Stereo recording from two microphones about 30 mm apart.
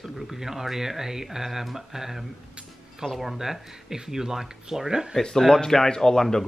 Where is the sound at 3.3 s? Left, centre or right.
Centre.